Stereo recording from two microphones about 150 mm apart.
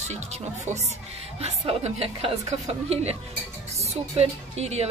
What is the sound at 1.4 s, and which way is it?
A woman's voice, 45° right (ahead or behind).